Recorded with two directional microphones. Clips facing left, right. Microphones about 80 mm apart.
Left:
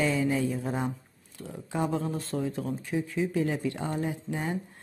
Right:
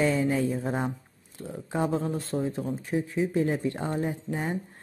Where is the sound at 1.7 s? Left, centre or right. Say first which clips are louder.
Right 2 dB; right.